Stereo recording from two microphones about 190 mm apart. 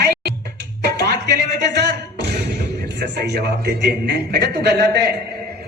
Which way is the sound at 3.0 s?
60° right (ahead or behind).